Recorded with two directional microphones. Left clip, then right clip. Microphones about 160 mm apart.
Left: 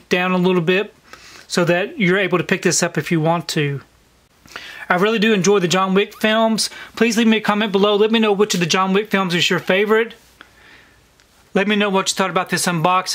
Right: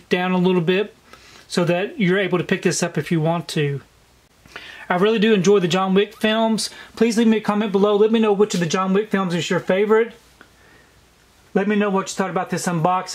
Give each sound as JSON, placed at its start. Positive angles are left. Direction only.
{"t": 0.1, "sound": "speech", "side_deg": 25}
{"t": 11.5, "sound": "speech", "side_deg": 30}